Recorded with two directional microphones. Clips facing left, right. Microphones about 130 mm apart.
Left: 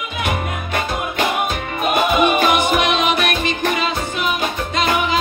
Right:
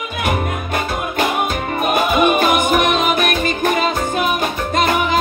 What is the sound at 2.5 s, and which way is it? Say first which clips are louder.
Music: right 2 dB; 45° right (ahead or behind).